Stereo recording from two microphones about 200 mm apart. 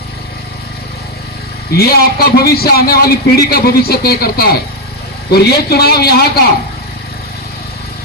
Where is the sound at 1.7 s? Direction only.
50° left (ahead or behind).